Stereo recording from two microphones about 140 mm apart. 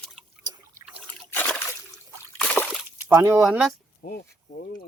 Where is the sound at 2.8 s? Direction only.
15° right (ahead or behind).